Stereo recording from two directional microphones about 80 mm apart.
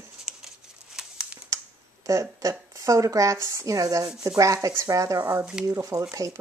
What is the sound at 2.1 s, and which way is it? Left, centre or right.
A woman's voice, right.